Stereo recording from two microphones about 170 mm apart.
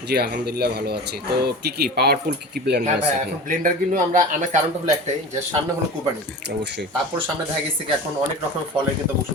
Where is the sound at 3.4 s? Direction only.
50° right (ahead or behind).